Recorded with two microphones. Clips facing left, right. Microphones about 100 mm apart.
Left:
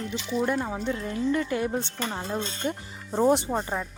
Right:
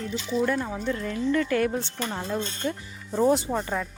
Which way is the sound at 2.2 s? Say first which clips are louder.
Right 1 dB; 25° left (ahead or behind).